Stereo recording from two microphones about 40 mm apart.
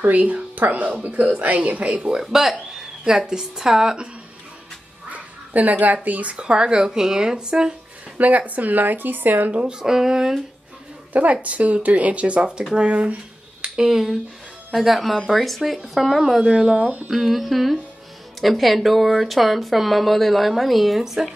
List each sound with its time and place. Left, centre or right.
0.0 s speech: right
2.1 s speech: centre
5.1 s dog: right
6.0 s speech: right
6.3 s speech: right
8.2 s speech: right
9.5 s speech: right
9.8 s speech: centre
11.4 s speech: right
12.7 s a sound: right
14.7 s speech: centre
16.4 s speech: centre
16.7 s speech: right
17.1 s speech: centre